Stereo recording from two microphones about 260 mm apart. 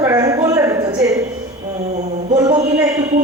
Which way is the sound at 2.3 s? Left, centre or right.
Centre.